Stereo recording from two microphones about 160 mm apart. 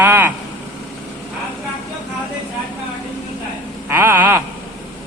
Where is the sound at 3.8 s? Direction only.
15° right (ahead or behind).